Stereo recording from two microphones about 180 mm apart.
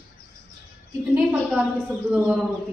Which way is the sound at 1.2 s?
5° right (ahead or behind).